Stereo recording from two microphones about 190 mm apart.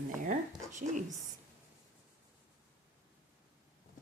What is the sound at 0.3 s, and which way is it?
Writing, 40° right (ahead or behind).